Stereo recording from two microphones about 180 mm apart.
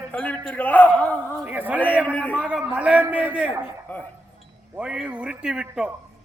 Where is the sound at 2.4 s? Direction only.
5° right (ahead or behind).